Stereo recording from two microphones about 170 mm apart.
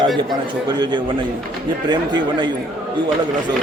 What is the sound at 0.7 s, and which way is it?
Speech, 25° right (ahead or behind).